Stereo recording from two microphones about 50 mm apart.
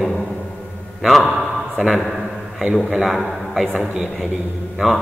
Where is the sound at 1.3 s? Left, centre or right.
Centre.